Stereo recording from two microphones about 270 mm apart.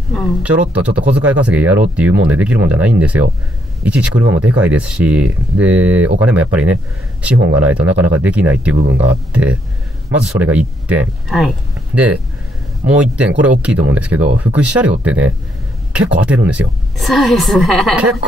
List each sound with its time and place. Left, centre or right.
0.1 s speech: centre